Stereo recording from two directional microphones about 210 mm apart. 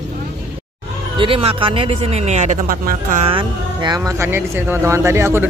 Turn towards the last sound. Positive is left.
turn(degrees=-10)  # may be behind; listen again after turning